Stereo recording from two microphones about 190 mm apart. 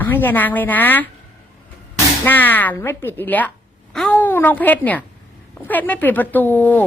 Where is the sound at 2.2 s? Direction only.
10° left (ahead or behind).